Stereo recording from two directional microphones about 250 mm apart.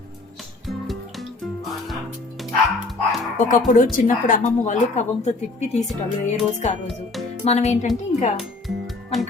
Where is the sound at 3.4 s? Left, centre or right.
Left.